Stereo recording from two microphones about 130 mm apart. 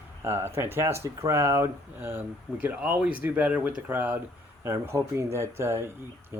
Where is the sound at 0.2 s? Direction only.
20° right (ahead or behind).